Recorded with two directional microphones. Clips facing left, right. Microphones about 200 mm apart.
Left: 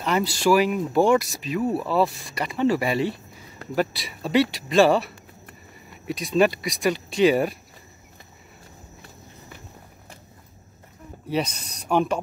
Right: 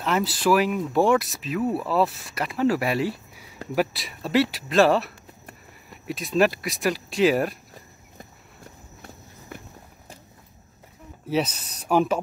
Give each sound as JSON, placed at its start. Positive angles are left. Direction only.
{"t": 0.0, "sound": "speech", "side_deg": 0}
{"t": 11.2, "sound": "speech", "side_deg": -5}